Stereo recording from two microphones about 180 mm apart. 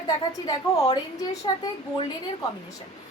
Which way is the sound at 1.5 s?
25° left (ahead or behind).